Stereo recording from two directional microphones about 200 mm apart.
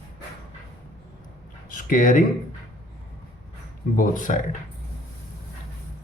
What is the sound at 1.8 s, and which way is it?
Speech, 40° left (ahead or behind).